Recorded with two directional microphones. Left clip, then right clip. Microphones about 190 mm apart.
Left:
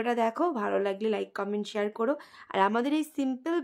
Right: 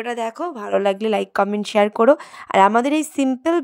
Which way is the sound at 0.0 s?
30° right (ahead or behind).